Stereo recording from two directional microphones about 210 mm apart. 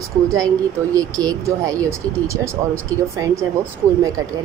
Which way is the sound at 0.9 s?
15° right (ahead or behind).